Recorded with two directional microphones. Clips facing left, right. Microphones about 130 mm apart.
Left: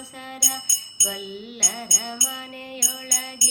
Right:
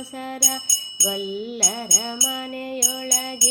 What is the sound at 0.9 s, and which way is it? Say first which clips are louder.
Wind chime: right 7 dB; 40° right (ahead or behind).